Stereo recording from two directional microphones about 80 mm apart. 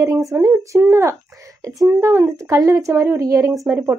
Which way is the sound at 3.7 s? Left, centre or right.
Right.